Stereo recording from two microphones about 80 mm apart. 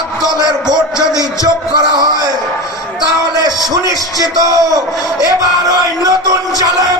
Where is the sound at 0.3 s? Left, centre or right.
Right.